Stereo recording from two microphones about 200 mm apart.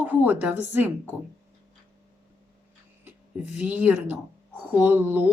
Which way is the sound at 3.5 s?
5° right (ahead or behind).